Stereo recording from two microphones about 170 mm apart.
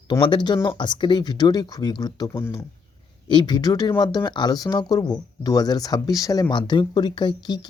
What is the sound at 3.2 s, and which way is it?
Speech, 25° left (ahead or behind).